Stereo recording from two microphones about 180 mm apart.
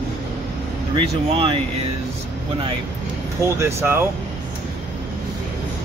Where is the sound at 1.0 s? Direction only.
30° right (ahead or behind).